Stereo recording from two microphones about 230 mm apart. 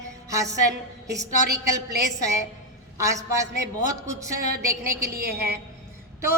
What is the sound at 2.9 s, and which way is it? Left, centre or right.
A woman's voice, centre.